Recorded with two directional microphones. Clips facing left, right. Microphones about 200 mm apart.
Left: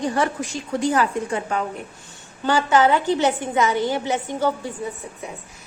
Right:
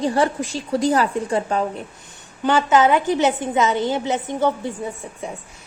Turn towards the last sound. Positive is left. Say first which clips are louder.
# right 2 dB
turn(degrees=-20)  # may be behind; listen again after turning